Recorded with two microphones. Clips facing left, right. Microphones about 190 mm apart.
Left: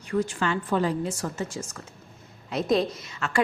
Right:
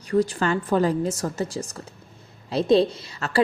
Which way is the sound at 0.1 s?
35° right (ahead or behind).